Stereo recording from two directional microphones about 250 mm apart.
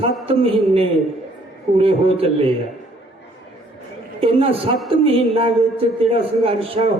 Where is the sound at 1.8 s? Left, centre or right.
Right.